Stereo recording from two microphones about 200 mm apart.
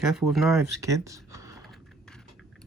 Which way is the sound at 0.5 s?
15° right (ahead or behind).